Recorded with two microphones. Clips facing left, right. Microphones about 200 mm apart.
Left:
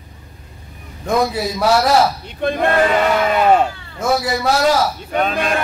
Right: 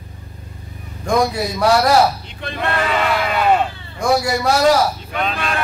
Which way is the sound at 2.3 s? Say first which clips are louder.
Left 6 dB; 50° left (ahead or behind).